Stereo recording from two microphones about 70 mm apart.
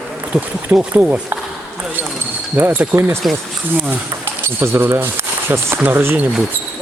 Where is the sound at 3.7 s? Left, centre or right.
Right.